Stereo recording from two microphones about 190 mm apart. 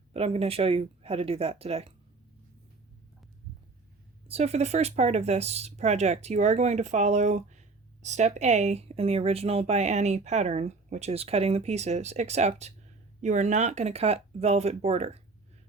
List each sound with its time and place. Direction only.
0.1 s speech: 30° right (ahead or behind)
4.3 s speech: 35° right (ahead or behind)